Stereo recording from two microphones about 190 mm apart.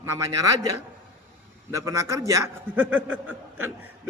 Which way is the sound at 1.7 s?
15° right (ahead or behind).